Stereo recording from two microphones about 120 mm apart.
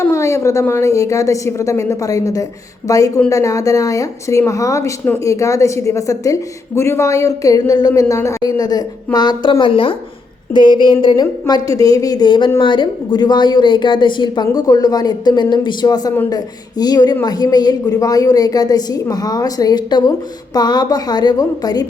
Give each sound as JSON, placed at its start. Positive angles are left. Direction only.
{"t": 0.0, "sound": "a woman's voice", "side_deg": 25}